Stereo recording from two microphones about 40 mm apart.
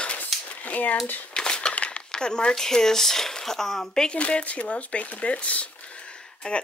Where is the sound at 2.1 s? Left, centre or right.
Centre.